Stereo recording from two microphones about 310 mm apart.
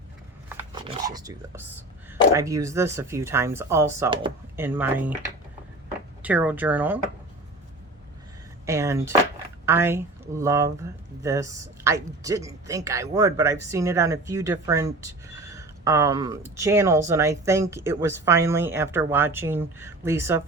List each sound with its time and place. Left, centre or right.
0.4 s a sound: centre
2.3 s speech: centre
6.2 s speech: centre
8.6 s speech: centre